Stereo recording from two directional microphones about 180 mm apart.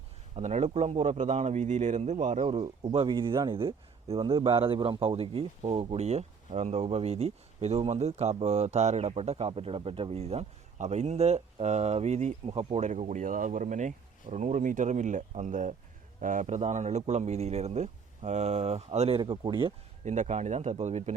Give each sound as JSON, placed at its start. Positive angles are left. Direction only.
{"t": 0.3, "sound": "speech", "side_deg": -40}
{"t": 20.1, "sound": "speech", "side_deg": -40}